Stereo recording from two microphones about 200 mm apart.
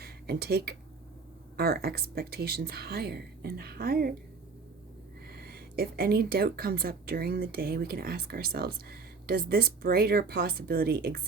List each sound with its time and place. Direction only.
0.0 s speech: 50° right (ahead or behind)
5.3 s speech: 50° right (ahead or behind)